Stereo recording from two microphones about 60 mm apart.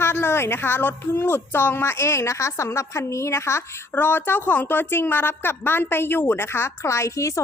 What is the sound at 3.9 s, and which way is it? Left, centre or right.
A woman's voice, left.